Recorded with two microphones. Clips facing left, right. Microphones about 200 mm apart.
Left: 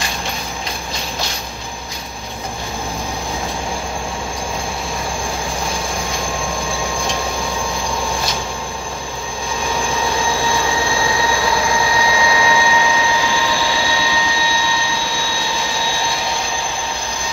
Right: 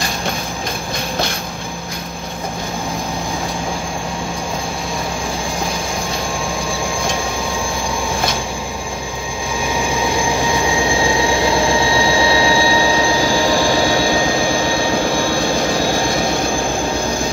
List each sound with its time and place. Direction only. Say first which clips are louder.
11.2 s jet engine: right 3 dB; 25° right (ahead or behind); by 16.5 s 50° right (ahead or behind)